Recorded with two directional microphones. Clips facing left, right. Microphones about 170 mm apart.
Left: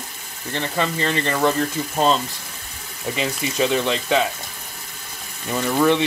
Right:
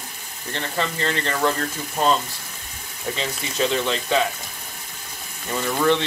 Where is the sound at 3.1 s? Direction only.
15° left (ahead or behind).